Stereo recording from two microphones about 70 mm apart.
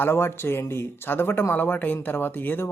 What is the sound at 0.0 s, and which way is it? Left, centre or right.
Speech, left.